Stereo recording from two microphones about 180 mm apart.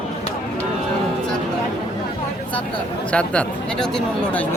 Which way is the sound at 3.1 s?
5° left (ahead or behind).